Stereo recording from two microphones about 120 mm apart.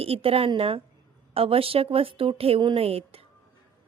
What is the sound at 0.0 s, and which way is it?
Speech, 50° right (ahead or behind).